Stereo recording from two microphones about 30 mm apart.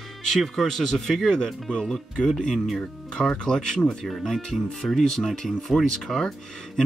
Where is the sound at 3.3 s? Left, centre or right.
Left.